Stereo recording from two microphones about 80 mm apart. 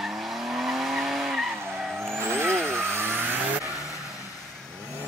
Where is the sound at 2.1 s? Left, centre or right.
Right.